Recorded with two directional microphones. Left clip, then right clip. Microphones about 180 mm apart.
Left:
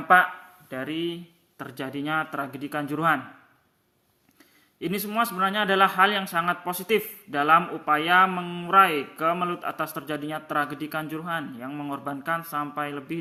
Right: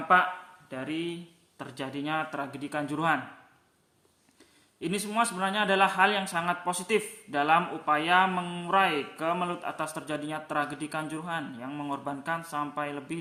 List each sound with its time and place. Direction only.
0.1 s a man's voice: 25° left (ahead or behind)
4.8 s a man's voice: 15° left (ahead or behind)